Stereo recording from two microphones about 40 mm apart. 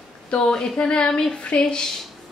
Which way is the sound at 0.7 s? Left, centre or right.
Left.